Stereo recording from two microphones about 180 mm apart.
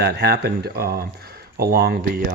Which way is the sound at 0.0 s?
65° right (ahead or behind).